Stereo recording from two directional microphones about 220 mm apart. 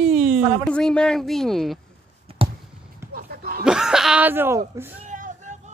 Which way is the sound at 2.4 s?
25° right (ahead or behind).